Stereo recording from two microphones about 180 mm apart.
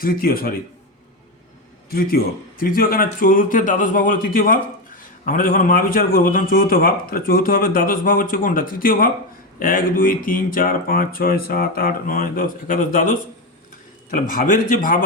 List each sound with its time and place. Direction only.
0.0 s a man's voice: 55° left (ahead or behind)
1.9 s a man's voice: 55° left (ahead or behind)